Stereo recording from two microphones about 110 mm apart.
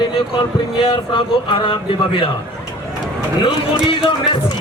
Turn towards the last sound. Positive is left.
turn(degrees=50)  # may be behind; listen again after turning